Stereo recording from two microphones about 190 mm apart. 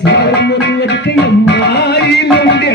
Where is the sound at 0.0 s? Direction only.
65° left (ahead or behind).